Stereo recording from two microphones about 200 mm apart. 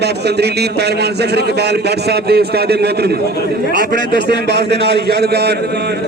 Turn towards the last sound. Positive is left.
turn(degrees=-55)  # may be behind; listen again after turning